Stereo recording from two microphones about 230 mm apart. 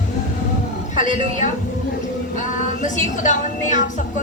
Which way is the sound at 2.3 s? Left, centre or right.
Left.